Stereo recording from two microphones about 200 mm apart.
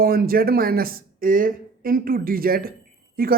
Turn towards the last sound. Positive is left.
turn(degrees=-50)  # may be behind; listen again after turning